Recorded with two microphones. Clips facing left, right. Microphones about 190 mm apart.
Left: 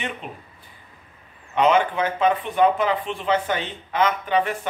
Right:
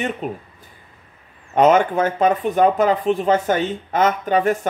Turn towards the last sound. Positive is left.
turn(degrees=-45)  # may be behind; listen again after turning